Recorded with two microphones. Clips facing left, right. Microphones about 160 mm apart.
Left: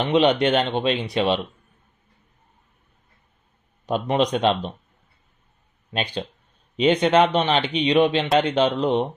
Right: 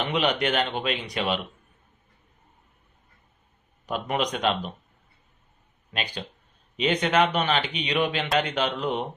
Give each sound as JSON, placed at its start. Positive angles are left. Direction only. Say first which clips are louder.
{"t": 0.1, "sound": "speech", "louder": "left 9 dB", "side_deg": 25}
{"t": 3.8, "sound": "speech", "louder": "left 6 dB", "side_deg": 30}
{"t": 5.9, "sound": "speech", "louder": "left 6 dB", "side_deg": 25}